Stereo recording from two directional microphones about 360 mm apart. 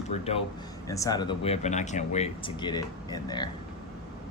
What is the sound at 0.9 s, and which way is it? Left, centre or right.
Speech, centre.